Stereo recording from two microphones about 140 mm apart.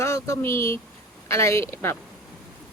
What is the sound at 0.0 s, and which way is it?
Speech, 20° left (ahead or behind).